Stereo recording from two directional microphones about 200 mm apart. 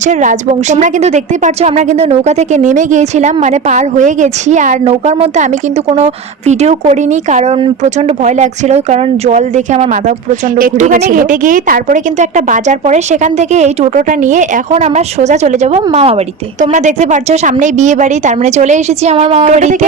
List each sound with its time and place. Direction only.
0.0 s a woman's voice: 35° right (ahead or behind)